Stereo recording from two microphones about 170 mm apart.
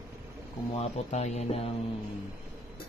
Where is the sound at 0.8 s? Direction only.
40° left (ahead or behind).